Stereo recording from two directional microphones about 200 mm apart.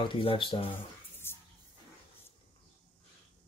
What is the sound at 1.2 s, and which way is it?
Music, 10° left (ahead or behind).